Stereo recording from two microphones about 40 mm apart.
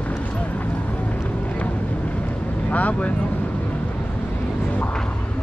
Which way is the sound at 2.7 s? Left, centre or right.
Left.